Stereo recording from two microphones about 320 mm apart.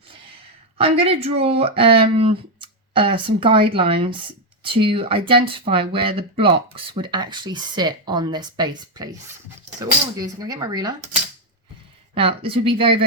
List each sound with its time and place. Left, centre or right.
0.8 s speech: centre
12.1 s speech: centre